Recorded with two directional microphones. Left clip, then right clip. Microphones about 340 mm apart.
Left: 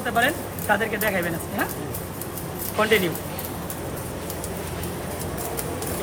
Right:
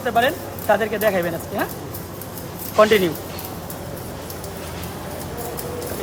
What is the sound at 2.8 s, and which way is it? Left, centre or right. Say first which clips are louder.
Speech: right 6 dB; right.